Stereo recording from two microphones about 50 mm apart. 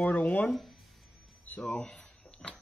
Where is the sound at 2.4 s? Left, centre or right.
Left.